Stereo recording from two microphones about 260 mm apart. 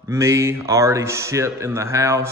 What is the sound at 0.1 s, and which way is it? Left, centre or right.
Speech, centre.